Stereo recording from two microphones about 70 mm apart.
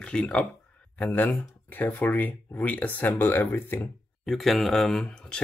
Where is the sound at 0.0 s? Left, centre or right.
Centre; by 3.9 s left.